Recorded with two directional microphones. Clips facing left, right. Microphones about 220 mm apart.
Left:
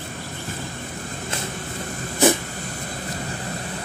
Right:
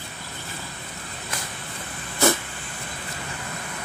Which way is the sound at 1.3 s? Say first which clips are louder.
Left 4 dB; 25° left (ahead or behind).